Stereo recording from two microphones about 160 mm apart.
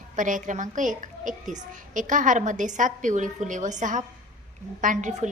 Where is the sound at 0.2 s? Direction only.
55° right (ahead or behind).